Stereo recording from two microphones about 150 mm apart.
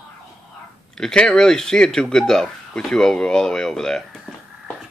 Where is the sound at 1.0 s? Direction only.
5° left (ahead or behind).